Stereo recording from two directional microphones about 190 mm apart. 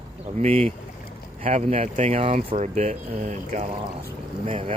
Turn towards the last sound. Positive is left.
turn(degrees=-30)  # may be behind; listen again after turning